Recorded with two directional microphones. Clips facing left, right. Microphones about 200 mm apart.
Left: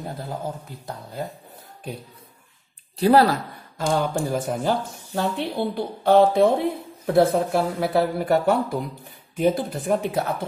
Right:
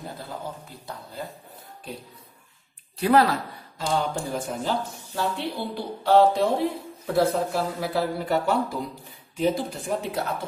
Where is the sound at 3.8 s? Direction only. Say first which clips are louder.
Left 4 dB; 55° left (ahead or behind).